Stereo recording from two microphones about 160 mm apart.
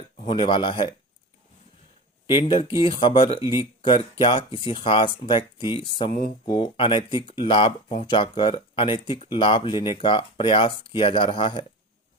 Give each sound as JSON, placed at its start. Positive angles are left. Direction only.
{"t": 0.2, "sound": "speech", "side_deg": 30}
{"t": 2.3, "sound": "speech", "side_deg": 30}